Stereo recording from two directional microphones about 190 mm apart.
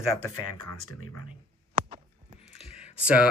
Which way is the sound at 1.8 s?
50° right (ahead or behind).